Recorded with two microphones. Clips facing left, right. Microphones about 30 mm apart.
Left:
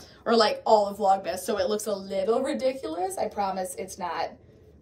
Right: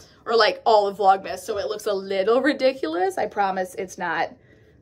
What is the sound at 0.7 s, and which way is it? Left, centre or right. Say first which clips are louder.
Speech: right 5 dB; right.